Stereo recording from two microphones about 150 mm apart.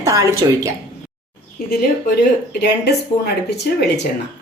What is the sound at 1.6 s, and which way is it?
Speech, 80° left.